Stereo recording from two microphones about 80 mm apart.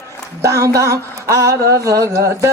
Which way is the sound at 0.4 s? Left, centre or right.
Right.